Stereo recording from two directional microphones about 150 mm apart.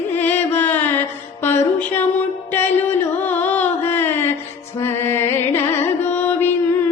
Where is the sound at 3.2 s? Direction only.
10° left (ahead or behind).